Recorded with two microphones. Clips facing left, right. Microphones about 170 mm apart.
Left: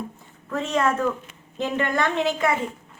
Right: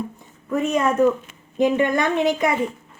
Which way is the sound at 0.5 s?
15° right (ahead or behind).